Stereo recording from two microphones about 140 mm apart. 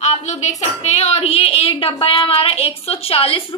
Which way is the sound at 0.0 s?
55° left (ahead or behind).